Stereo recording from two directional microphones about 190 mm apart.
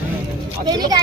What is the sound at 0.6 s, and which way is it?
Speech, 20° right (ahead or behind).